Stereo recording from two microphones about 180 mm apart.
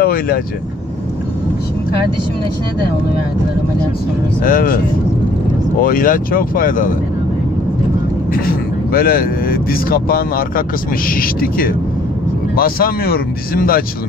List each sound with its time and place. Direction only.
0.0 s vehicle: 55° left (ahead or behind)
4.5 s speech: 50° left (ahead or behind)
5.8 s speech: 50° left (ahead or behind)
8.5 s speech: 55° left (ahead or behind)